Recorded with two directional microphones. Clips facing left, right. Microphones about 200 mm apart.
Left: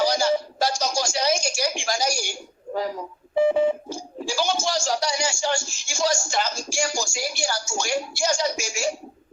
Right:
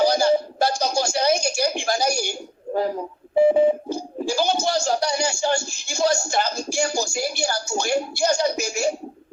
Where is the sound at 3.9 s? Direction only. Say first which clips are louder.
Right 4 dB; 60° right (ahead or behind).